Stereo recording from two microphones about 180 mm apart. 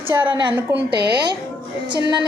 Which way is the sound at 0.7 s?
65° right (ahead or behind).